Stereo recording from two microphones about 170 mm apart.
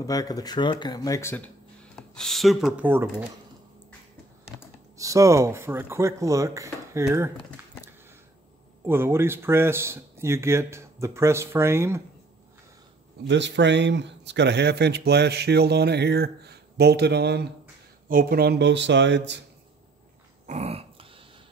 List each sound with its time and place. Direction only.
0.0 s speech: 20° left (ahead or behind); by 2.9 s centre (ahead or behind)
2.9 s speech: 10° right (ahead or behind)
4.9 s speech: 20° right (ahead or behind)
8.8 s speech: 15° right (ahead or behind)
13.3 s speech: 90° right
18.0 s speech: 55° right (ahead or behind); by 19.4 s 90° right
20.4 s dog: 40° right (ahead or behind)